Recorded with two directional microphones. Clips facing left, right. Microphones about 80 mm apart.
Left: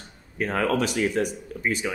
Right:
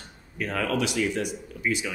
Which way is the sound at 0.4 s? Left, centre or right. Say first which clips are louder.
Left 3 dB; left.